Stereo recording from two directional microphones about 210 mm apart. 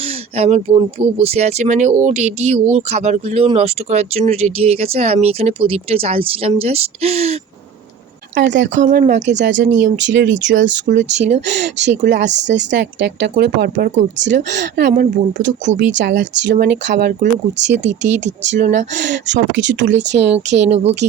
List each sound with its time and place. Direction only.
0.0 s speech: 30° right (ahead or behind)
8.4 s speech: 60° right (ahead or behind)
8.7 s speech: 40° right (ahead or behind)
9.2 s speech: 55° right (ahead or behind)
10.9 s speech: 45° right (ahead or behind)
14.9 s speech: 40° right (ahead or behind)
15.4 s speech: 60° right (ahead or behind)
17.2 s speech: 35° right (ahead or behind)
19.3 s speech: 60° right (ahead or behind)
20.5 s speech: 30° right (ahead or behind)